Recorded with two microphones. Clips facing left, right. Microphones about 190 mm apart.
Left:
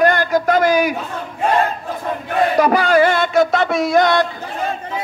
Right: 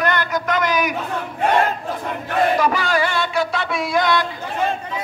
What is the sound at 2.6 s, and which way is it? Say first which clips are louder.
Music: left 6 dB; 45° left (ahead or behind).